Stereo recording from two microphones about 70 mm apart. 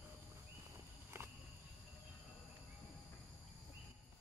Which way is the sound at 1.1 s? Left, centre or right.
Right.